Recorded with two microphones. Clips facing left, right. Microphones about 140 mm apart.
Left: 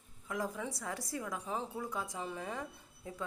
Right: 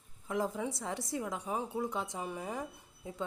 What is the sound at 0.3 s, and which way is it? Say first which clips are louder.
Speech: right 4 dB; 25° right (ahead or behind).